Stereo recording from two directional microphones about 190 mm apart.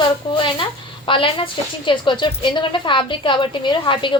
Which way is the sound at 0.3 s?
25° left (ahead or behind).